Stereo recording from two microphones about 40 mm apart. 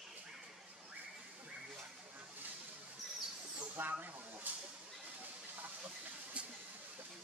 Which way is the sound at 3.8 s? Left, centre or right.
Right.